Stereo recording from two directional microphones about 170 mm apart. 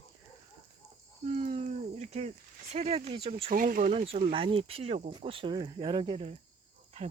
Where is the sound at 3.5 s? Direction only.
55° right (ahead or behind).